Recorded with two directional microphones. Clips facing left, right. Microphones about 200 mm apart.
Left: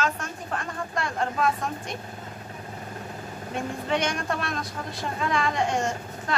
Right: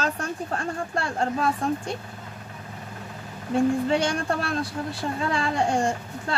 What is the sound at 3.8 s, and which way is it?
A woman's voice, 30° right (ahead or behind).